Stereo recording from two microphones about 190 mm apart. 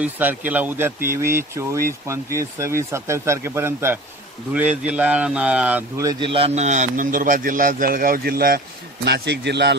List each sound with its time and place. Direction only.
0.0 s speech: 10° right (ahead or behind); by 9.8 s 65° right (ahead or behind)